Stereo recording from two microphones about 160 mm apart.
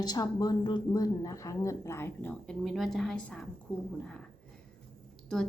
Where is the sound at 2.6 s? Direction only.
Centre (ahead or behind).